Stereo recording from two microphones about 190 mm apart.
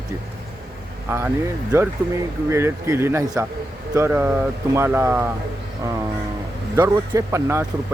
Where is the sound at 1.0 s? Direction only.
10° right (ahead or behind).